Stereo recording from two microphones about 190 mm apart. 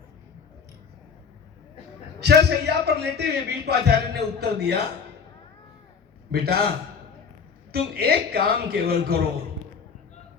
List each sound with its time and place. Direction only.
2.1 s a man's voice: 60° right (ahead or behind)
6.3 s a man's voice: 55° right (ahead or behind)
7.7 s a man's voice: 55° right (ahead or behind)